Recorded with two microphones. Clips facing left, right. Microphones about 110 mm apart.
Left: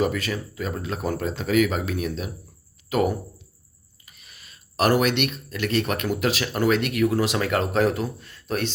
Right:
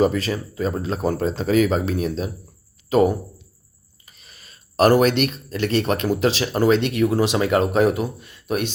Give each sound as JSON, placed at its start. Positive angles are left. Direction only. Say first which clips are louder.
{"t": 0.0, "sound": "speech", "louder": "right 5 dB", "side_deg": -30}
{"t": 4.0, "sound": "speech", "louder": "right 2 dB", "side_deg": -35}